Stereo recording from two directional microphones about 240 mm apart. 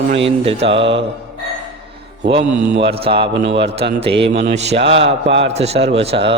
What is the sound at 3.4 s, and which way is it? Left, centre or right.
Speech, right.